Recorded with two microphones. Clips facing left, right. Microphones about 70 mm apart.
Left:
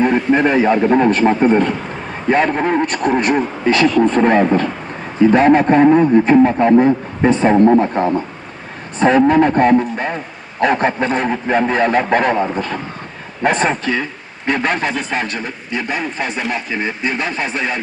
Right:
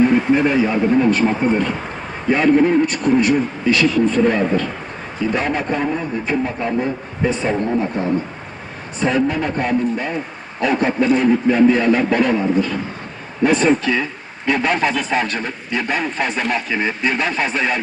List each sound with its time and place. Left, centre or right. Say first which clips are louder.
0.0 s a man's voice: left 1 dB; left
15.3 s a man's voice: even; centre